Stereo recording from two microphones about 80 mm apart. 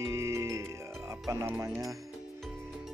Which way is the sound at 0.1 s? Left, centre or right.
Right.